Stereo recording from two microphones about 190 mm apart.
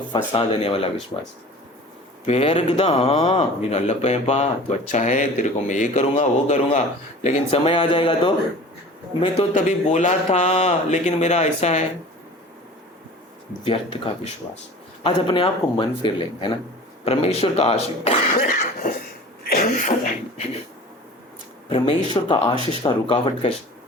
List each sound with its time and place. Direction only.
0.1 s a man's voice: 30° left (ahead or behind)
9.6 s speech: 40° left (ahead or behind)
13.7 s a man's voice: 30° left (ahead or behind)
18.8 s cough: 50° left (ahead or behind)
19.5 s a sound: 50° left (ahead or behind)
21.7 s a man's voice: 25° left (ahead or behind)